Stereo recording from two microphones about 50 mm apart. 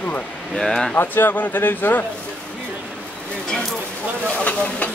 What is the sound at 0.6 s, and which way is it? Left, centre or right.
Speech, centre.